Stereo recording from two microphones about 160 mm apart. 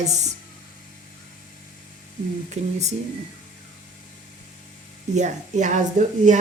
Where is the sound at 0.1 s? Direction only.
45° right (ahead or behind).